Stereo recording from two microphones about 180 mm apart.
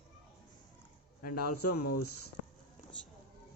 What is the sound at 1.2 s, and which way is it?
Speech, 55° left (ahead or behind).